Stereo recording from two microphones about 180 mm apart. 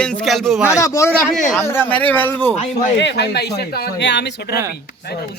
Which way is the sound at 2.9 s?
70° left (ahead or behind).